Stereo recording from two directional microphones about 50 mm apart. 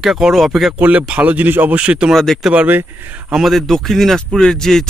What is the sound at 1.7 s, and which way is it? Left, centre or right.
Speech, right.